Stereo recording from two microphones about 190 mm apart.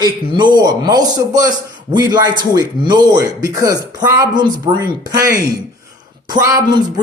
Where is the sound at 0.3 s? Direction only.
25° right (ahead or behind).